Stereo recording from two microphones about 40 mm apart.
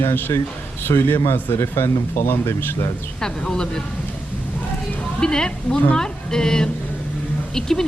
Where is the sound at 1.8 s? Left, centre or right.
Left.